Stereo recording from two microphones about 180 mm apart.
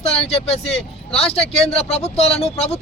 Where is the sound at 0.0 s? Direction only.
35° left (ahead or behind).